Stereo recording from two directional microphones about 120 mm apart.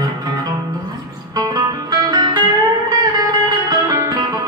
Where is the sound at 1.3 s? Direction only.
35° right (ahead or behind).